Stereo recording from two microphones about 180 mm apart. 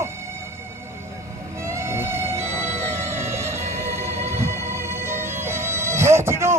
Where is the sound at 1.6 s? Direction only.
15° right (ahead or behind).